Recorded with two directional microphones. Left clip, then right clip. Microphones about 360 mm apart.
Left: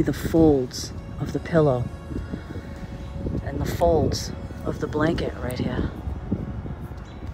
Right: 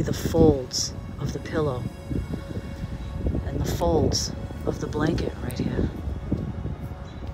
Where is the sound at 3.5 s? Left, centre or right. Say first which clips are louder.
Left 5 dB; centre.